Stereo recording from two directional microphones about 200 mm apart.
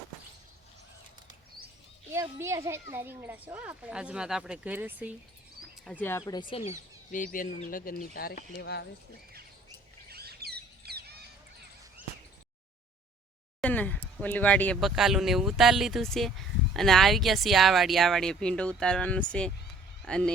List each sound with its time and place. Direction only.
2.1 s speech: 15° right (ahead or behind)
5.8 s speech: 5° left (ahead or behind)
6.5 s speech: 35° left (ahead or behind); by 8.9 s 55° left (ahead or behind)
10.1 s bird: 50° right (ahead or behind)
13.6 s speech: 10° left (ahead or behind)